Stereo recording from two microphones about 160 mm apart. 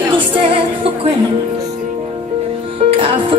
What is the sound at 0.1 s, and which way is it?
Music, 35° right (ahead or behind).